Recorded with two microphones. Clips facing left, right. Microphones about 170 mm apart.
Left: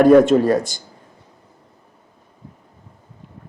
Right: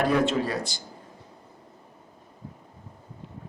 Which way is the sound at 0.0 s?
50° left (ahead or behind).